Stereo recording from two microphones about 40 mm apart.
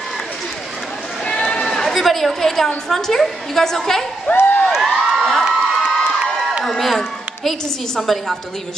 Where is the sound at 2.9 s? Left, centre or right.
Centre.